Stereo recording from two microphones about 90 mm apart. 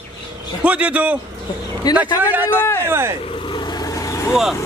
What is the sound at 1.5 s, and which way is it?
Speech, 55° left (ahead or behind).